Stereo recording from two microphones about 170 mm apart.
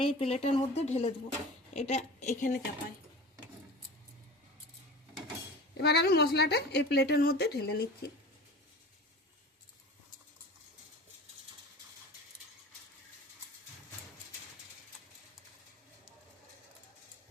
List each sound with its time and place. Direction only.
0.0 s a woman's voice: 35° left (ahead or behind)
5.7 s a woman's voice: 75° left (ahead or behind)